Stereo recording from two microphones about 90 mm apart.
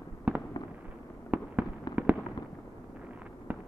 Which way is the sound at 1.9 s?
50° left (ahead or behind).